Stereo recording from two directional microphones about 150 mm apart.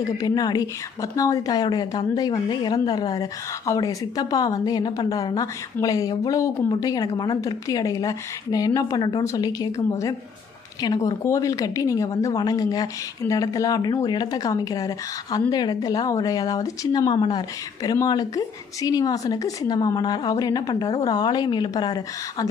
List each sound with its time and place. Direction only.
0.2 s a woman's voice: 25° left (ahead or behind)